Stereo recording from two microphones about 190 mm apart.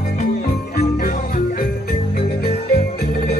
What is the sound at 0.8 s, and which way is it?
Jingle bell, 45° left (ahead or behind).